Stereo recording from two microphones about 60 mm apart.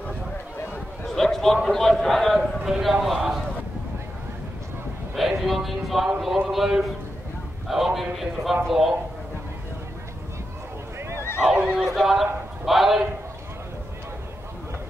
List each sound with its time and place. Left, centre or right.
1.0 s a man's voice: centre
5.1 s a man's voice: centre
11.0 s neigh: right
11.4 s speech: centre
11.8 s a man's voice: centre